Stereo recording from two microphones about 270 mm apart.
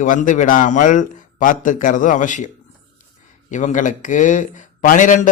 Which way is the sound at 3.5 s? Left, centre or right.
Left.